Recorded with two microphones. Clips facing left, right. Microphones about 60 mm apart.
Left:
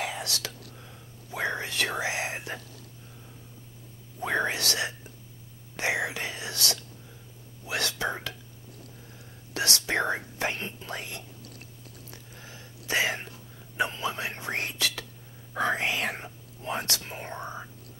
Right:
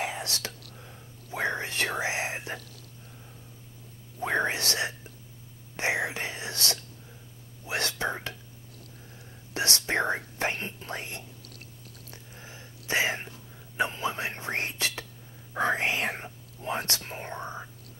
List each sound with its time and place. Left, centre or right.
0.0 s whispering: right
4.2 s whispering: right
9.5 s whispering: right
12.4 s whispering: right
16.6 s speech: right
17.1 s whispering: centre